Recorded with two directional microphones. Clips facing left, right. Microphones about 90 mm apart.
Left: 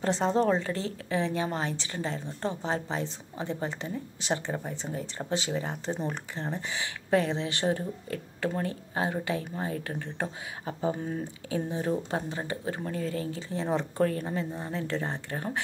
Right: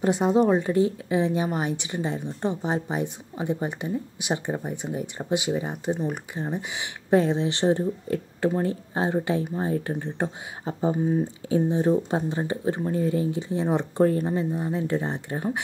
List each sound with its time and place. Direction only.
0.0 s a woman's voice: 10° right (ahead or behind)
11.4 s speech: 25° right (ahead or behind)